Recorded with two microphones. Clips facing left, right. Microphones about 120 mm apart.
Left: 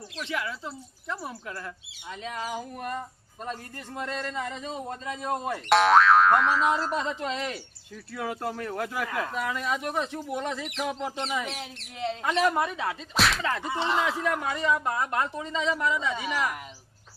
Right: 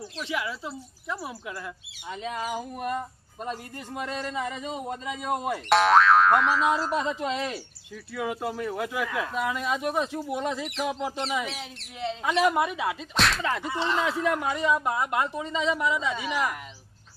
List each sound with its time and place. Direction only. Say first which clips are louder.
0.2 s speech: right 1 dB; 10° right (ahead or behind)
8.1 s speech: right 2 dB; 5° right (ahead or behind)
9.3 s speech: right 2 dB; 15° right (ahead or behind)
13.1 s speech: left 1 dB; centre (ahead or behind)
13.7 s speech: even; 20° left (ahead or behind)
14.3 s speech: right 2 dB; 20° right (ahead or behind)